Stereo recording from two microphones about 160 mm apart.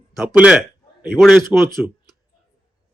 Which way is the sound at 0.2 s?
5° right (ahead or behind).